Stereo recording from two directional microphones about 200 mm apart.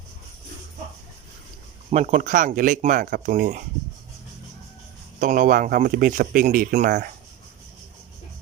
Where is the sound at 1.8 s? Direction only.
35° right (ahead or behind).